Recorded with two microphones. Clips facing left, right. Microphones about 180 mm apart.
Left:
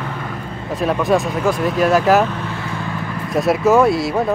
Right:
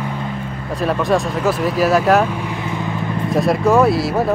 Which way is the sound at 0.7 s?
Centre (ahead or behind).